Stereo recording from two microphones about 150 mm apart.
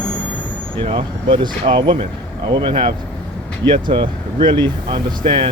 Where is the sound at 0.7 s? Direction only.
35° right (ahead or behind).